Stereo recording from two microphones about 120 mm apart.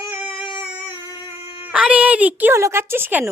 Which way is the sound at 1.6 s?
10° right (ahead or behind).